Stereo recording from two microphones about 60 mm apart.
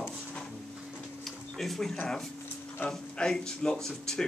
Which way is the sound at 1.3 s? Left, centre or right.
Centre.